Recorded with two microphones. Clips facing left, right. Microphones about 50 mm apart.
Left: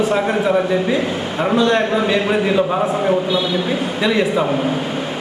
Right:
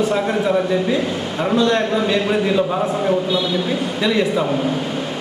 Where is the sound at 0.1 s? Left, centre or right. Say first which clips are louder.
Left 2 dB; left.